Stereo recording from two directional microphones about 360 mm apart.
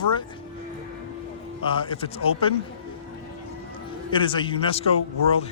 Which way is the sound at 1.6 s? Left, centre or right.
Centre.